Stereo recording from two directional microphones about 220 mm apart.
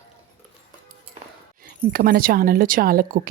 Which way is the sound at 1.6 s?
45° right (ahead or behind).